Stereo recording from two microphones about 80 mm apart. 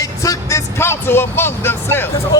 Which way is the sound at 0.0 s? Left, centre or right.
Left.